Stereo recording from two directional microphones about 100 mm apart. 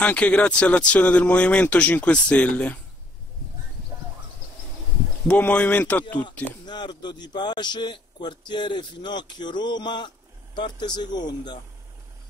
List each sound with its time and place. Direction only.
0.0 s speech: 10° left (ahead or behind)
5.3 s speech: 10° left (ahead or behind)
6.6 s a man's voice: 50° left (ahead or behind)